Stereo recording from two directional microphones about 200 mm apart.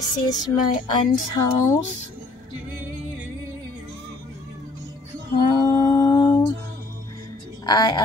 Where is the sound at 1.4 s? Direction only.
20° left (ahead or behind).